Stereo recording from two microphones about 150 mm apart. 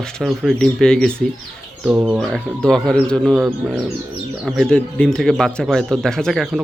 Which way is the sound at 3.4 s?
10° right (ahead or behind).